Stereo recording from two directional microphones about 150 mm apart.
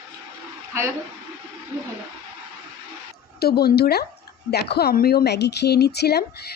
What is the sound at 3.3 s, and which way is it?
Speech, 90° left.